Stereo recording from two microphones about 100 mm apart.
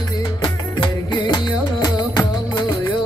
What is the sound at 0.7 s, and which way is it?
Music, 50° left (ahead or behind).